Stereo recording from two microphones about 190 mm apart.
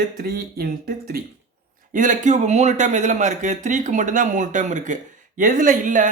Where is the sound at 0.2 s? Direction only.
50° right (ahead or behind).